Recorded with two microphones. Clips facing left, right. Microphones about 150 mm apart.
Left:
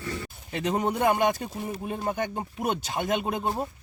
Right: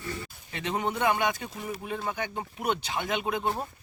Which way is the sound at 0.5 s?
40° left (ahead or behind).